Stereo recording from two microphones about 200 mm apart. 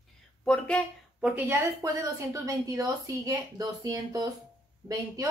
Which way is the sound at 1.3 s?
15° right (ahead or behind).